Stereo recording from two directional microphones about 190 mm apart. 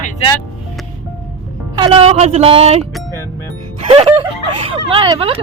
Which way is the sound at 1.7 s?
30° right (ahead or behind).